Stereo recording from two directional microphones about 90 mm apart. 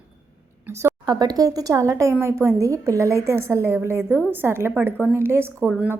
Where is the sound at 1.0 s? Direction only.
50° right (ahead or behind).